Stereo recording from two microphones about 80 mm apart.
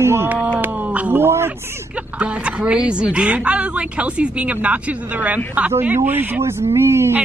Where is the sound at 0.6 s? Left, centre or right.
Right.